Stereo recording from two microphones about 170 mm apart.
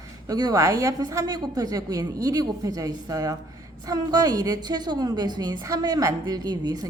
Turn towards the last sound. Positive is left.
turn(degrees=-25)  # may be behind; listen again after turning